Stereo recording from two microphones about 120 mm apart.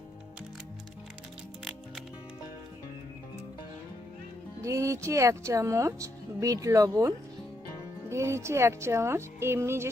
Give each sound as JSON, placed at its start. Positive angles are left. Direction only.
{"t": 4.6, "sound": "speech", "side_deg": -25}
{"t": 8.1, "sound": "speech", "side_deg": -25}